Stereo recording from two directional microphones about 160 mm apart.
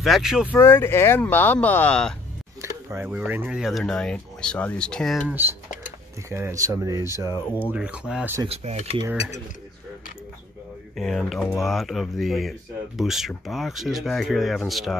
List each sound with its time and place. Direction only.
0.0 s speech: centre (ahead or behind)
0.5 s speech: 15° left (ahead or behind)
2.6 s speech: 15° right (ahead or behind); by 5.2 s 5° left (ahead or behind)
5.3 s speech: 15° right (ahead or behind)
8.5 s speech: 45° right (ahead or behind)
9.1 s speech: 40° left (ahead or behind)
11.0 s speech: centre (ahead or behind)